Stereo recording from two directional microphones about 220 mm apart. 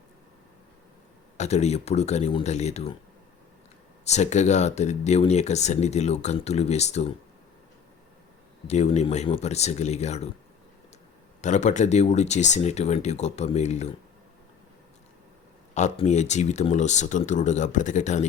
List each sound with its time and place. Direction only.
1.4 s speech: 30° left (ahead or behind)
4.0 s speech: 30° left (ahead or behind)
8.6 s speech: 30° left (ahead or behind)
11.3 s speech: 35° left (ahead or behind)
15.7 s speech: 30° left (ahead or behind)